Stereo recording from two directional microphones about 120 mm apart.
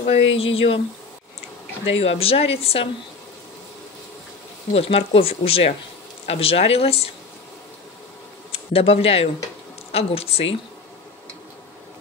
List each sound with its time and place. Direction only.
0.0 s speech: 55° left (ahead or behind)
1.9 s speech: 55° left (ahead or behind)
4.7 s speech: 50° left (ahead or behind)
8.5 s speech: 55° left (ahead or behind)